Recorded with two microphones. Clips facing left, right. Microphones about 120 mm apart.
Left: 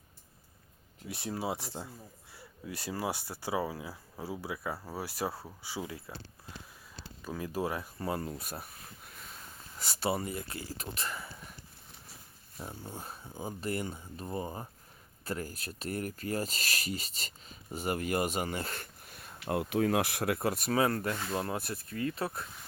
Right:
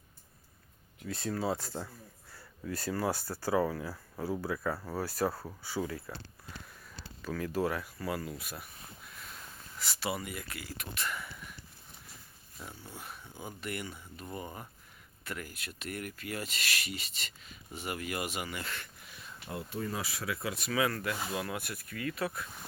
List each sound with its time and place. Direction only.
1.0 s speech: 15° left (ahead or behind); by 8.6 s 35° left (ahead or behind)
9.7 s speech: 40° left (ahead or behind)
12.9 s speech: 35° left (ahead or behind)